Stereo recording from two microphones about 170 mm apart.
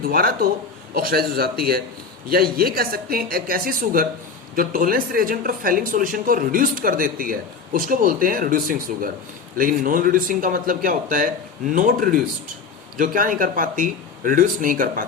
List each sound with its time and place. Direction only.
0.0 s speech: 60° right (ahead or behind)